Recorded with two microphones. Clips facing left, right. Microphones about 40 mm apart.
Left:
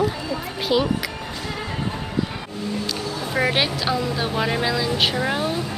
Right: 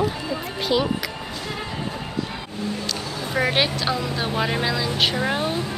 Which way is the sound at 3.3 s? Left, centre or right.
Centre.